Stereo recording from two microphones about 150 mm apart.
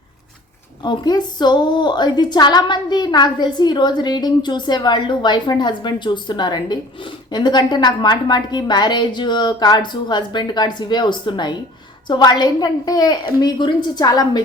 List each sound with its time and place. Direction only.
0.9 s speech: 30° left (ahead or behind)